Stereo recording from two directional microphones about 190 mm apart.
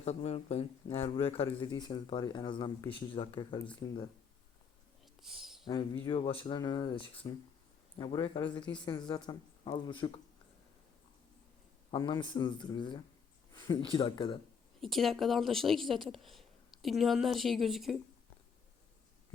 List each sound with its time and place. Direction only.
0.0 s speech: 35° left (ahead or behind); by 4.1 s 20° left (ahead or behind)
5.2 s a sound: centre (ahead or behind)
5.6 s speech: 20° left (ahead or behind)
11.9 s speech: 20° left (ahead or behind)
14.8 s a woman's voice: centre (ahead or behind)